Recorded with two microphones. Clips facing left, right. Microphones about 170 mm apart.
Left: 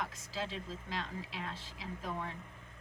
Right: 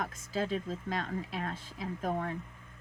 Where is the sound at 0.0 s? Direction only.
50° right (ahead or behind).